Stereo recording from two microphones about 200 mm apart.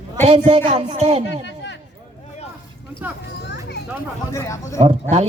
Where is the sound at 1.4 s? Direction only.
60° left (ahead or behind).